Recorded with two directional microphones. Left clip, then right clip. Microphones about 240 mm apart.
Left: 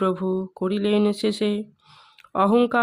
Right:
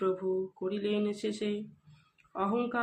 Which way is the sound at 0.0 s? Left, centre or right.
Left.